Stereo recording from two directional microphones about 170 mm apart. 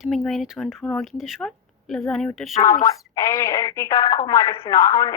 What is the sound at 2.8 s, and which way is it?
Speech, 20° left (ahead or behind).